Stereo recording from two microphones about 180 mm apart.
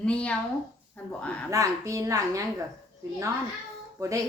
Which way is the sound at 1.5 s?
15° right (ahead or behind).